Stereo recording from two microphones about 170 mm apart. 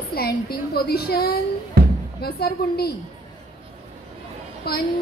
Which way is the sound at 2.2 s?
70° left (ahead or behind).